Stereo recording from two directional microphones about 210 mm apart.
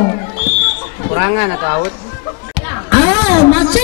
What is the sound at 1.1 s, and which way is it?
Speech, 15° left (ahead or behind).